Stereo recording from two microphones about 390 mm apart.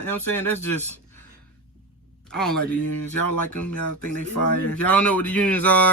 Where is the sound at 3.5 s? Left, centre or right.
Left.